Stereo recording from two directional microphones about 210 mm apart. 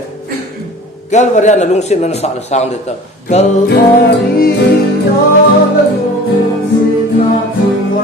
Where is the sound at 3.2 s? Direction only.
45° left (ahead or behind).